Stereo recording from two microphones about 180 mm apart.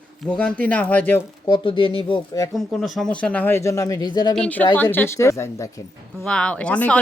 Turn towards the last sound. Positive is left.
turn(degrees=5)  # may be behind; listen again after turning